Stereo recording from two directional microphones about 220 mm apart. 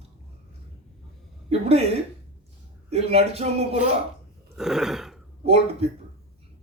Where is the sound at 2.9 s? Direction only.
25° right (ahead or behind).